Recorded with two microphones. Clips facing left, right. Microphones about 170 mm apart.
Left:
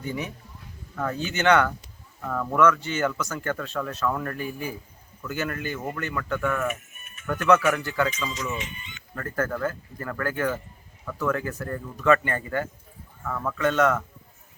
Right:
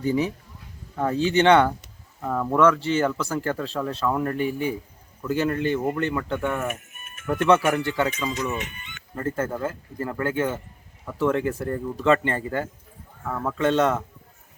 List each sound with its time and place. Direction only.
0.0 s speech: 30° right (ahead or behind)
6.7 s music: 50° right (ahead or behind)
7.3 s speech: 30° right (ahead or behind)
8.1 s speech: 55° right (ahead or behind)
9.1 s speech: 25° right (ahead or behind)